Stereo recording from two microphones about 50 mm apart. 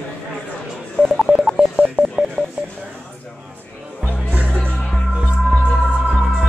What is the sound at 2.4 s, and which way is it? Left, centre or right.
Telephone dialing, left.